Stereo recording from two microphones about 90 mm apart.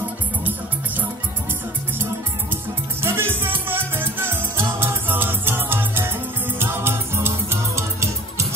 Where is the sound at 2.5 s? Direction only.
30° right (ahead or behind).